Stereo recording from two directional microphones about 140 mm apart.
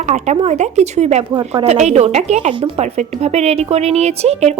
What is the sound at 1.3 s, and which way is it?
A woman's voice, 40° right (ahead or behind).